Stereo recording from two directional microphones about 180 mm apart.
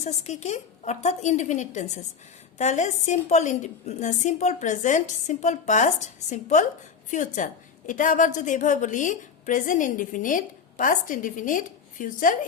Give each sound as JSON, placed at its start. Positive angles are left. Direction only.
{"t": 0.0, "sound": "a woman's voice", "side_deg": 40}